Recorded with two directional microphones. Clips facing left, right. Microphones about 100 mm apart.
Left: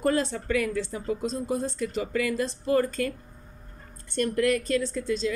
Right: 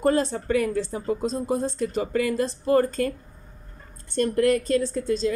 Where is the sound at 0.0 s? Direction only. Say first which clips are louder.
Right 3 dB; 35° right (ahead or behind).